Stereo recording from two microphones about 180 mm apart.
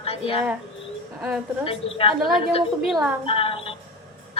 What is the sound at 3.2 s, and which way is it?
Music, 30° left (ahead or behind).